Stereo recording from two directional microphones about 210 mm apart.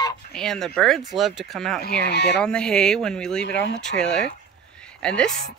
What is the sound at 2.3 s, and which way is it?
Speech, 5° left (ahead or behind).